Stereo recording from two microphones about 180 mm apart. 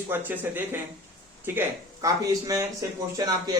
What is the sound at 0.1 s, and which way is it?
Speech, 10° right (ahead or behind).